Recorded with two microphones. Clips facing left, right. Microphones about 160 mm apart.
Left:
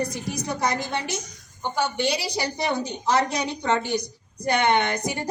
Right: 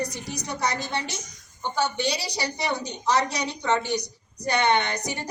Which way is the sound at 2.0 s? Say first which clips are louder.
Left 3 dB; 50° left (ahead or behind).